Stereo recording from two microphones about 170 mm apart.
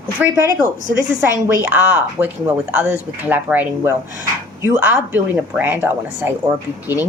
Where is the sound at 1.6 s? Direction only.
10° right (ahead or behind).